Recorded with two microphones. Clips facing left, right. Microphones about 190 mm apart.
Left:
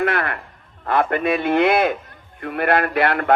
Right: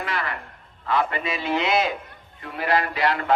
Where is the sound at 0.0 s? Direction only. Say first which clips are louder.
Left 8 dB; 60° left (ahead or behind).